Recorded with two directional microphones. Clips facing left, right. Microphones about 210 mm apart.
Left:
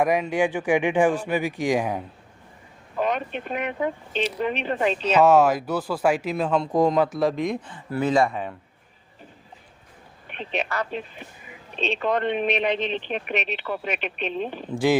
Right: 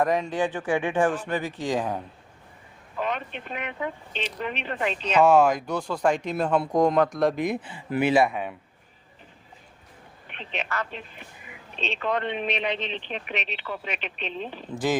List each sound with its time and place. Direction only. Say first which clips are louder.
0.0 s speech: left 3 dB; 10° left (ahead or behind)
3.0 s speech: left 5 dB; 45° left (ahead or behind)
5.0 s a man's voice: left 1 dB; 5° left (ahead or behind)
10.2 s speech: left 5 dB; 45° left (ahead or behind)